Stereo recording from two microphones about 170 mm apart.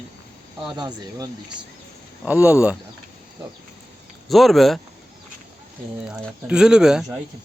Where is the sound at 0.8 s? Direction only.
25° right (ahead or behind).